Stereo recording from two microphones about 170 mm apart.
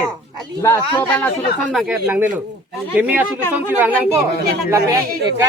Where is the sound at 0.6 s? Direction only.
10° left (ahead or behind).